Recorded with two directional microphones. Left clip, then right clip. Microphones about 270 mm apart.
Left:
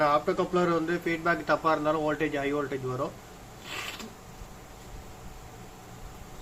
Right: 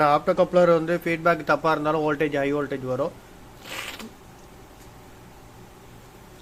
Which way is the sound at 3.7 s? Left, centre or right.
Right.